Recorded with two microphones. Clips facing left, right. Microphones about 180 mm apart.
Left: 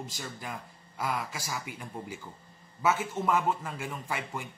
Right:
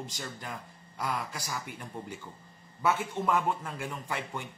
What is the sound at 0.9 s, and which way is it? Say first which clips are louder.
A man's voice: left 1 dB; 5° left (ahead or behind).